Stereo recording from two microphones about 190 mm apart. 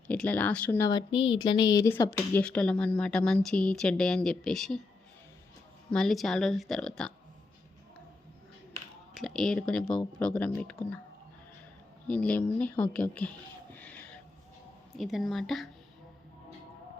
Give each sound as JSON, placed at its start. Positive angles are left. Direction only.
{"t": 0.1, "sound": "speech", "side_deg": 5}
{"t": 5.9, "sound": "speech", "side_deg": 0}
{"t": 9.1, "sound": "speech", "side_deg": 0}
{"t": 12.0, "sound": "speech", "side_deg": 5}
{"t": 13.7, "sound": "a sound", "side_deg": 10}
{"t": 14.9, "sound": "speech", "side_deg": 0}